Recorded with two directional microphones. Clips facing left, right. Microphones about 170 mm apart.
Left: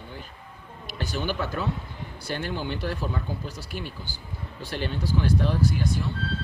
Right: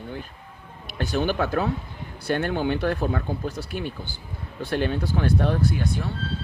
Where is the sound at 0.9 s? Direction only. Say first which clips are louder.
Right 5 dB; 55° right (ahead or behind).